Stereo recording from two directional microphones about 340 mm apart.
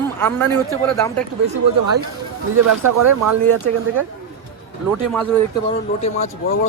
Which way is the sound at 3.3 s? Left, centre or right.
Right.